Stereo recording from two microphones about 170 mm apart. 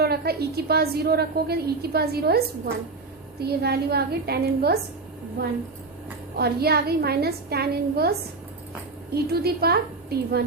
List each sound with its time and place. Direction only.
0.0 s a woman's voice: 70° right (ahead or behind)
3.4 s a woman's voice: 70° right (ahead or behind)
6.3 s a woman's voice: 70° right (ahead or behind)
9.1 s a woman's voice: 65° right (ahead or behind)